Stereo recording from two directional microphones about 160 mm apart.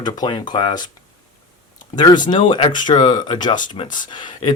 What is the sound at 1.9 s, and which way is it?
Speech, 25° left (ahead or behind).